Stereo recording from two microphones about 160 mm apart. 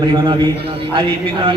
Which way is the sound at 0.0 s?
30° right (ahead or behind).